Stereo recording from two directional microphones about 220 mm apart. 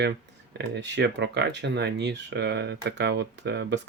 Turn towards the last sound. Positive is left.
turn(degrees=-50)  # may be behind; listen again after turning